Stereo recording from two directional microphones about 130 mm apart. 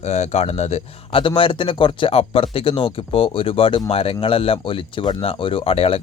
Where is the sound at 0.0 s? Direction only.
60° left (ahead or behind).